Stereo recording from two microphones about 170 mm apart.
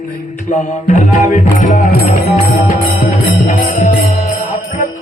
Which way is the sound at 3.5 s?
45° left (ahead or behind).